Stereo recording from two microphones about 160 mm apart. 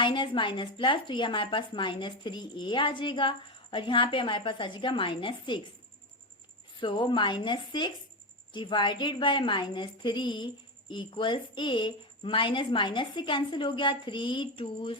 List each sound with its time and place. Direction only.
0.0 s a woman's voice: 30° left (ahead or behind)
6.7 s a woman's voice: 30° left (ahead or behind)